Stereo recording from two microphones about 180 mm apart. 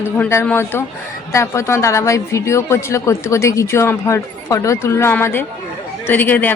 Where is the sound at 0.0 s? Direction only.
15° left (ahead or behind).